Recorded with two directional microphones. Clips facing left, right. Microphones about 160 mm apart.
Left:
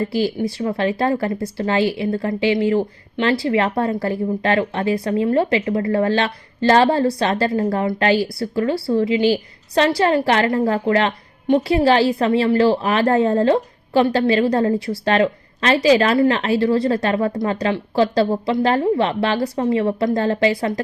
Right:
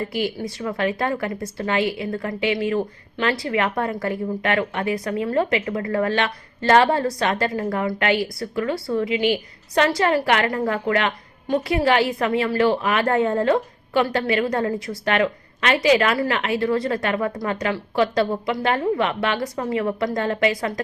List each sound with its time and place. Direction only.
0.1 s speech: 30° left (ahead or behind)